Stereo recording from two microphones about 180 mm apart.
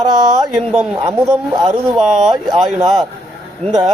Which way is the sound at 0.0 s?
20° right (ahead or behind).